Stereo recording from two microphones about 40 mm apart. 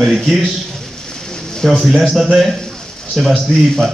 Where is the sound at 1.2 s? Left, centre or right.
Centre.